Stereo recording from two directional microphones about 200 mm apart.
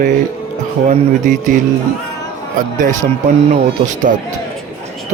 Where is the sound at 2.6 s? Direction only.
40° right (ahead or behind).